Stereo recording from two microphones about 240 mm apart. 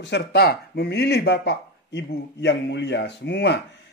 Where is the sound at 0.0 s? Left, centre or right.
Left.